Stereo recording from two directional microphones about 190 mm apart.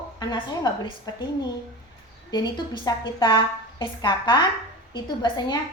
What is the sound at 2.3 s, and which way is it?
A woman's voice, 20° left (ahead or behind).